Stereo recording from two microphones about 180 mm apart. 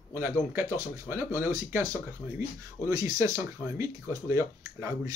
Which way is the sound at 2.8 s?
20° right (ahead or behind).